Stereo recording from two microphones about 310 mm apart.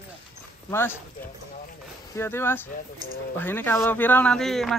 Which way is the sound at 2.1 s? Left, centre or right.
Centre.